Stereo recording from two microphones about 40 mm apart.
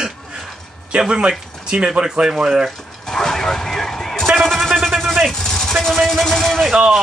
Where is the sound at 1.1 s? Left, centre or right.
Right.